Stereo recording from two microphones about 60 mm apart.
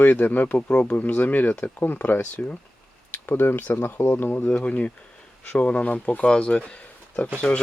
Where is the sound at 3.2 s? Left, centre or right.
Left.